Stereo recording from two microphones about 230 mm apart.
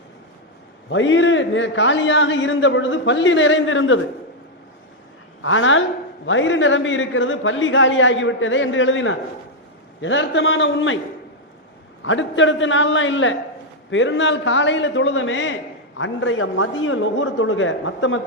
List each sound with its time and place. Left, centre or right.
0.9 s a man's voice: left
5.4 s a woman's voice: left
12.0 s a man's voice: left